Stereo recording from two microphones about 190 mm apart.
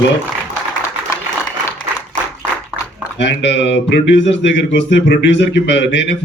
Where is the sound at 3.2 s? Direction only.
65° left (ahead or behind).